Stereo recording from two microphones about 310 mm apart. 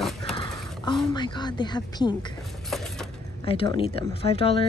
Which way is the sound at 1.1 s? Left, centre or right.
Centre.